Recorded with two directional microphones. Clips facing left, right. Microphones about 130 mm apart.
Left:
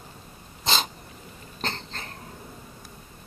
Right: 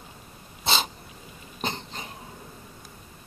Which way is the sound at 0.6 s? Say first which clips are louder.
Even; 5° right (ahead or behind).